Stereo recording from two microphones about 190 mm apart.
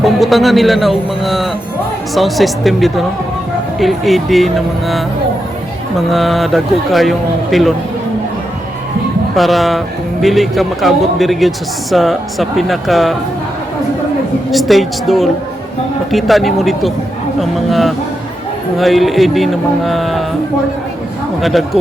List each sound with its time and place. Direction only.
0.0 s speech: centre (ahead or behind)
6.1 s speech: centre (ahead or behind)
9.3 s speech: centre (ahead or behind)
14.5 s speech: centre (ahead or behind)
21.4 s speech: centre (ahead or behind)